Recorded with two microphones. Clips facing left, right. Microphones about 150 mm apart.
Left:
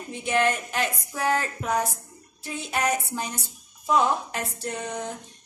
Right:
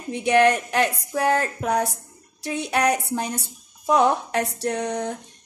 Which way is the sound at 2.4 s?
75° right (ahead or behind).